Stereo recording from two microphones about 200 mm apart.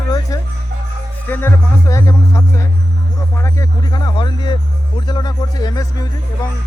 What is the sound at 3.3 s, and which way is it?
Speech, 15° left (ahead or behind).